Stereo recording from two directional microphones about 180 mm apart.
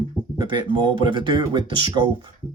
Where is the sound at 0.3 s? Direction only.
25° right (ahead or behind).